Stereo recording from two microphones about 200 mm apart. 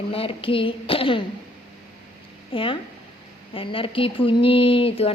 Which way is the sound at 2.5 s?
25° left (ahead or behind).